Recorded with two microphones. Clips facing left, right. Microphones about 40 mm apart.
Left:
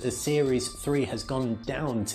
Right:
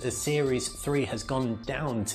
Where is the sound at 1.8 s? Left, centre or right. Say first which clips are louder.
Left 2 dB; centre.